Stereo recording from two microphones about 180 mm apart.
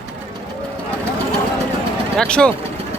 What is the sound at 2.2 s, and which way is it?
Speech, 5° left (ahead or behind).